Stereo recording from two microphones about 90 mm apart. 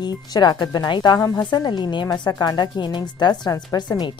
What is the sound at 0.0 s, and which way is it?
A woman's voice, 50° left (ahead or behind).